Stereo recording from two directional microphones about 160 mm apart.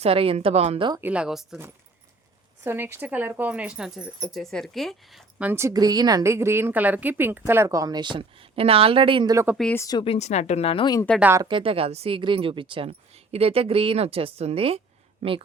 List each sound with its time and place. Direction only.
0.0 s speech: 35° right (ahead or behind)
1.0 s speech: 5° right (ahead or behind)
2.6 s speech: 15° right (ahead or behind)
5.4 s a woman's voice: 15° right (ahead or behind); by 9.3 s 30° right (ahead or behind)
9.3 s speech: 15° right (ahead or behind)
9.7 s a woman's voice: 20° left (ahead or behind)
10.0 s a woman's voice: 40° left (ahead or behind)
11.2 s speech: 15° right (ahead or behind)
11.4 s speech: 35° right (ahead or behind)